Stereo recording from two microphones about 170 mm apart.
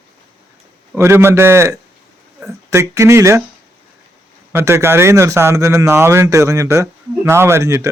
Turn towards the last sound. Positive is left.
turn(degrees=-15)  # may be behind; listen again after turning